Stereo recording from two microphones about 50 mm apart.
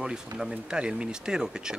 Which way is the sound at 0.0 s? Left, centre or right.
Centre.